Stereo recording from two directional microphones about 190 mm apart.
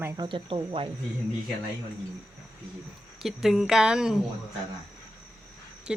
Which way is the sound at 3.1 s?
Centre (ahead or behind).